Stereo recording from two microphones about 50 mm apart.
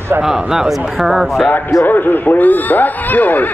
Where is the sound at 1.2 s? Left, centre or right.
Centre.